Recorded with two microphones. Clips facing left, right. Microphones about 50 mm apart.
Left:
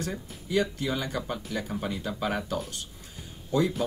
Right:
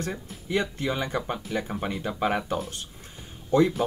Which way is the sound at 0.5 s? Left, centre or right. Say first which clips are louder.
Even; right.